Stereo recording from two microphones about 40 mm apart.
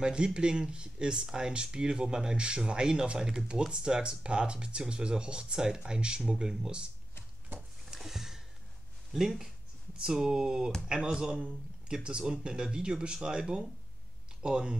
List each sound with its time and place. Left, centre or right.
0.0 s speech: right
8.0 s sniff: centre
9.1 s speech: centre